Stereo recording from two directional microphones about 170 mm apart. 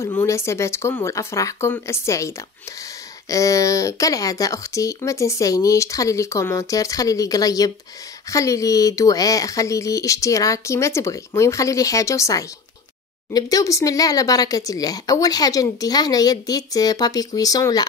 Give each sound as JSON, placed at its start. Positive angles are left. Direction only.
{"t": 0.2, "sound": "speech", "side_deg": 15}